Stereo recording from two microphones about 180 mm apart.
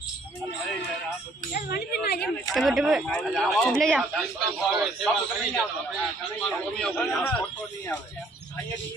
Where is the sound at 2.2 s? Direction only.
Centre (ahead or behind).